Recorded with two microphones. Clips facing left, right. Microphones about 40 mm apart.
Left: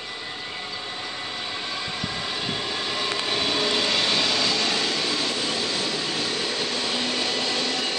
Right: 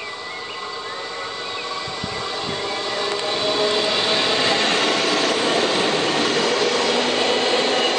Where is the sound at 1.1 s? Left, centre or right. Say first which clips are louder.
Right 3 dB; centre.